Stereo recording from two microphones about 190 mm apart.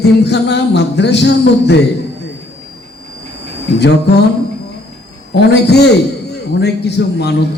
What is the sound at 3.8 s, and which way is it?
Speech, 60° left (ahead or behind).